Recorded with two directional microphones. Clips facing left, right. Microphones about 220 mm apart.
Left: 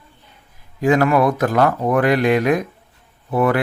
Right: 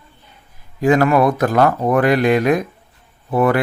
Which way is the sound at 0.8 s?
40° right (ahead or behind).